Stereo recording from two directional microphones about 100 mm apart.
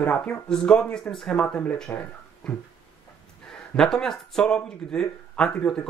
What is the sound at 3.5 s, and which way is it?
Speech, 5° left (ahead or behind).